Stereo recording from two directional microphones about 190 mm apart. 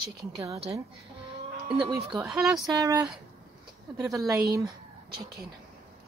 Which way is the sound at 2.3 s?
Centre (ahead or behind).